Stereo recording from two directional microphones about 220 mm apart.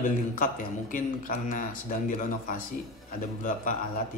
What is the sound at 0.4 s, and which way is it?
Speech, 40° left (ahead or behind).